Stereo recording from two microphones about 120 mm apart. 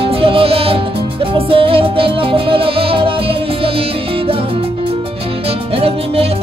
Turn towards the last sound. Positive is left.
turn(degrees=-55)  # may be behind; listen again after turning